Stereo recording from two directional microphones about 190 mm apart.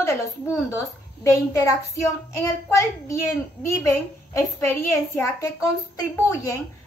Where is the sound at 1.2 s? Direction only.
15° left (ahead or behind).